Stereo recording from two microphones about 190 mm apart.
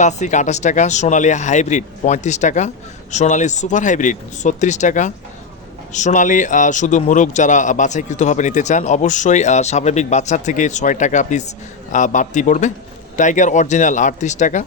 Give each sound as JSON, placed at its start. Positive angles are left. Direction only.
{"t": 0.0, "sound": "a man's voice", "side_deg": 40}